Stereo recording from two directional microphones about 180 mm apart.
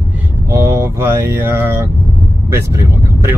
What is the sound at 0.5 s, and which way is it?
Speech, 15° right (ahead or behind).